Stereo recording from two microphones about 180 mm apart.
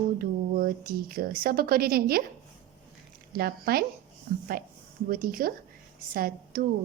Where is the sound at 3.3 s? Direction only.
55° right (ahead or behind).